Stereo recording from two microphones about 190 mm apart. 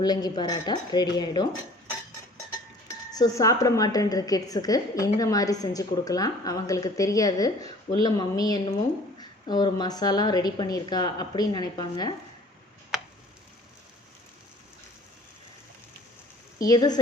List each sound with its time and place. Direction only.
0.0 s a woman's voice: 20° left (ahead or behind)
3.1 s a woman's voice: 20° left (ahead or behind)
16.6 s a woman's voice: 20° left (ahead or behind)